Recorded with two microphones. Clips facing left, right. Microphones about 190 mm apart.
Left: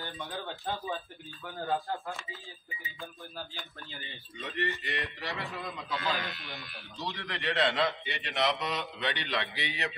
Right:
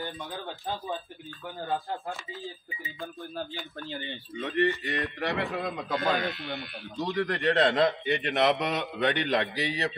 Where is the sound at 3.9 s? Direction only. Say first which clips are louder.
Right 10 dB; 55° right (ahead or behind); by 9.9 s 40° right (ahead or behind).